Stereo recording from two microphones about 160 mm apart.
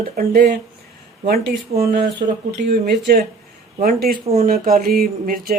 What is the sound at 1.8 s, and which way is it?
Speech, 85° right.